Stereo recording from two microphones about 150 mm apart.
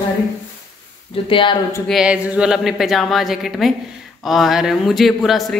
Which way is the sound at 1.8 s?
5° right (ahead or behind).